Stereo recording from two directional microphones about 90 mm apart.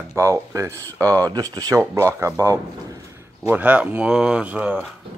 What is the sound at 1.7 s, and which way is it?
Speech, 35° right (ahead or behind).